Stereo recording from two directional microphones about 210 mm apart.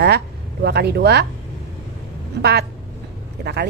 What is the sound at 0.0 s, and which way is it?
Speech, 50° right (ahead or behind).